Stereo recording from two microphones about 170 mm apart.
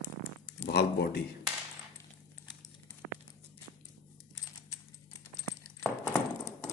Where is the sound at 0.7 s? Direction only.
70° left (ahead or behind).